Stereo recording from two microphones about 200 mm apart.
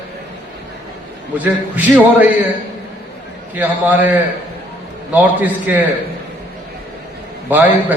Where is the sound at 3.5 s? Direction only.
10° right (ahead or behind).